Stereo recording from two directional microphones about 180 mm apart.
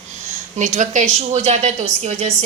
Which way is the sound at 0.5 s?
45° right (ahead or behind).